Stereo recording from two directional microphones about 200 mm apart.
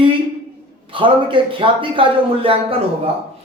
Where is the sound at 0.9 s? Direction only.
25° right (ahead or behind).